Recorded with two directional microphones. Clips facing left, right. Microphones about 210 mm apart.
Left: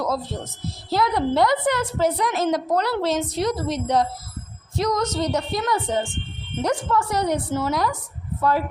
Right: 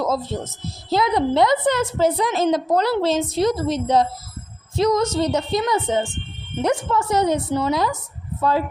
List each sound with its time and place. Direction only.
0.0 s a woman's voice: 25° right (ahead or behind)